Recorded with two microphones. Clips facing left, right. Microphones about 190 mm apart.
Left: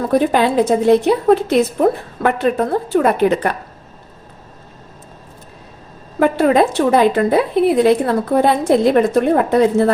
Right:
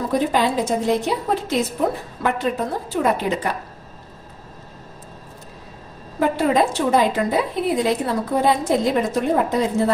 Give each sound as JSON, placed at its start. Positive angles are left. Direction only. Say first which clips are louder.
{"t": 0.1, "sound": "a woman's voice", "louder": "left 6 dB", "side_deg": 60}
{"t": 6.1, "sound": "a woman's voice", "louder": "left 5 dB", "side_deg": 65}